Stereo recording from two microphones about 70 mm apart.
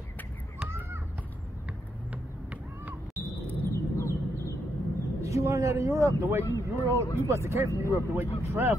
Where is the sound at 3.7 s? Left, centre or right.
Left.